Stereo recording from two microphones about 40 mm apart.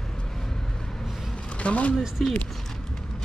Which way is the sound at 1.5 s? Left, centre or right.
Left.